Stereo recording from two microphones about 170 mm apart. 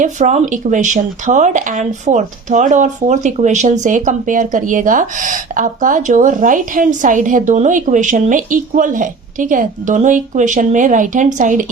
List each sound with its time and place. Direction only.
0.0 s speech: 45° right (ahead or behind)